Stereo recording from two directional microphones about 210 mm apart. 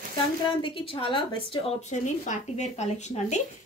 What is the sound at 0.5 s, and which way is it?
A woman's voice, 25° left (ahead or behind).